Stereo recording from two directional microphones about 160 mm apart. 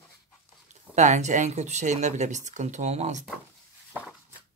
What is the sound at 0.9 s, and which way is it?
Speech, 45° right (ahead or behind).